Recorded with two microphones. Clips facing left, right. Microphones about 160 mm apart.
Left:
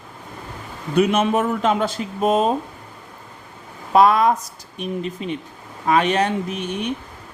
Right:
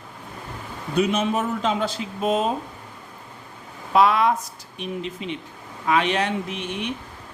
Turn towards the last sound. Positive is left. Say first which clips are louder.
# left 4 dB
turn(degrees=45)  # may be behind; listen again after turning